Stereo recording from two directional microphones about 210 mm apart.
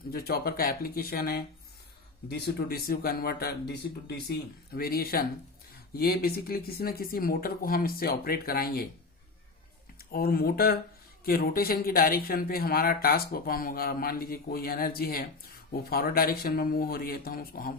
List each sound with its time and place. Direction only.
0.1 s speech: 45° left (ahead or behind)
10.0 s speech: 45° left (ahead or behind)